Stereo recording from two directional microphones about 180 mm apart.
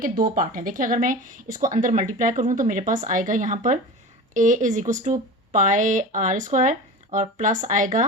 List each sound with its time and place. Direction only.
0.0 s speech: 50° right (ahead or behind)